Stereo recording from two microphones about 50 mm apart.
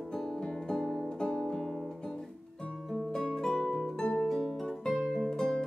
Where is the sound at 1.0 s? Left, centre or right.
Left.